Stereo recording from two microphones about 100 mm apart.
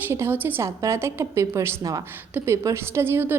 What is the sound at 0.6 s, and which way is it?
A woman's voice, 30° right (ahead or behind).